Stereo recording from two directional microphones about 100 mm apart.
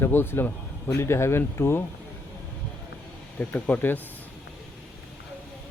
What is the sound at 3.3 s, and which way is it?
Speech, 20° left (ahead or behind).